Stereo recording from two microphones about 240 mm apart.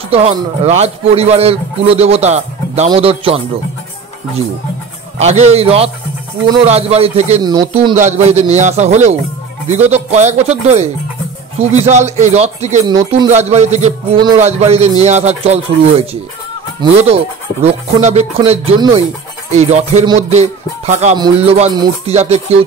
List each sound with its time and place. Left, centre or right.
0.1 s a man's voice: right
5.2 s a man's voice: right
10.1 s a man's voice: right
12.8 s a man's voice: centre